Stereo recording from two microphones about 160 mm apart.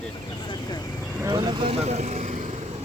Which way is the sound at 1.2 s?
25° right (ahead or behind).